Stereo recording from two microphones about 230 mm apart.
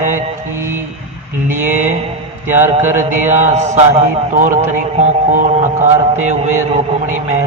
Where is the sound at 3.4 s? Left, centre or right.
Right.